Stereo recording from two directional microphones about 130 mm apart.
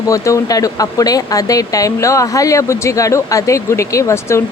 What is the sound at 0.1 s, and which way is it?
Speech, 25° left (ahead or behind).